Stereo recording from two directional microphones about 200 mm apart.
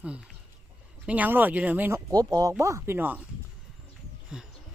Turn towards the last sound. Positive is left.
turn(degrees=-5)  # may be behind; listen again after turning